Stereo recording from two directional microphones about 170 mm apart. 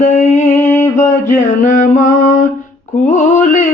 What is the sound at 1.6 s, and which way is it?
Mantra, 45° left (ahead or behind).